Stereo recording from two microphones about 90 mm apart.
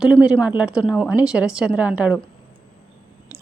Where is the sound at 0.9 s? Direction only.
5° left (ahead or behind).